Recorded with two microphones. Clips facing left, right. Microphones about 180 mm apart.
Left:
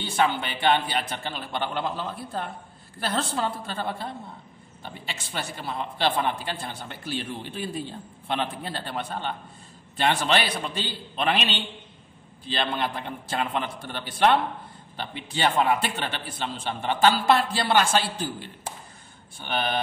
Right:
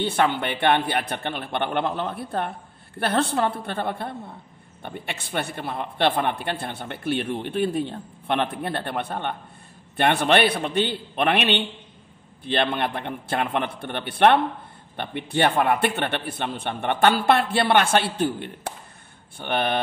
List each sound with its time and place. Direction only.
0.0 s a man's voice: 60° right (ahead or behind)